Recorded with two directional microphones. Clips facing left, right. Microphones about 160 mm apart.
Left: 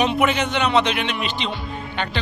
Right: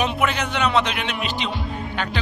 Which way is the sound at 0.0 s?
Centre (ahead or behind).